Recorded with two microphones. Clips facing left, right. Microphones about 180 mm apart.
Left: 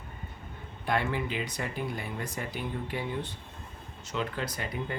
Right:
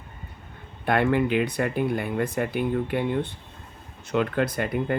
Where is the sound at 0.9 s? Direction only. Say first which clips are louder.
Right 9 dB; 60° right (ahead or behind).